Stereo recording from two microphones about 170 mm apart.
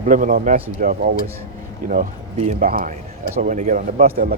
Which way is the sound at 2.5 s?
55° right (ahead or behind).